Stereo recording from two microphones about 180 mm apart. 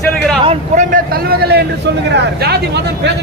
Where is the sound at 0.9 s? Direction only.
55° right (ahead or behind).